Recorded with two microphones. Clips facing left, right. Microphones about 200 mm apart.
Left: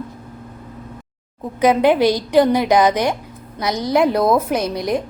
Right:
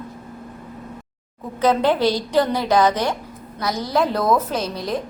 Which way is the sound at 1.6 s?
15° left (ahead or behind).